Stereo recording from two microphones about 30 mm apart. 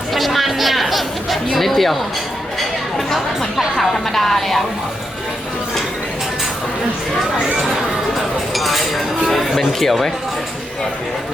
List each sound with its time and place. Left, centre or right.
0.1 s chatter: centre
3.8 s speech: centre
8.5 s chink: centre
9.6 s speech: centre